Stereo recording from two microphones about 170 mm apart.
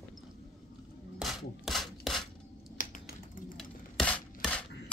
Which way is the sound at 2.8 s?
50° left (ahead or behind).